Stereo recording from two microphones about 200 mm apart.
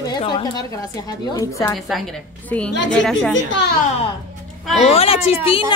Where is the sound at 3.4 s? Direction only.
65° left (ahead or behind).